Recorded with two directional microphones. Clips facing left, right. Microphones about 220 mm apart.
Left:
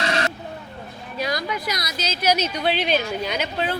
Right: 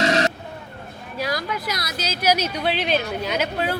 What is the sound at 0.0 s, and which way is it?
Vehicle, 40° right (ahead or behind).